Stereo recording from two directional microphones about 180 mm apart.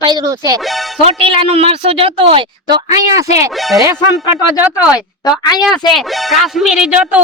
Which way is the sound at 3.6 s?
Centre (ahead or behind).